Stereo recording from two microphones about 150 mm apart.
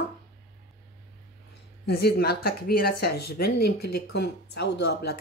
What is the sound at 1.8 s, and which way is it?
Speech, 90° left.